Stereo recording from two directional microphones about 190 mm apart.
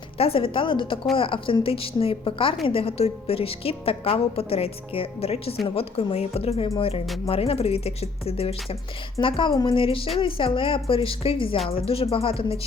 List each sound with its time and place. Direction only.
0.2 s a woman's voice: 30° left (ahead or behind)